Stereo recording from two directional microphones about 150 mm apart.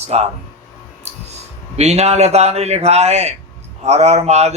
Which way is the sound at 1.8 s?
45° right (ahead or behind).